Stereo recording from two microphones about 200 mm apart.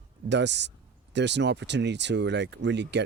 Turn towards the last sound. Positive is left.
turn(degrees=-60)  # may be behind; listen again after turning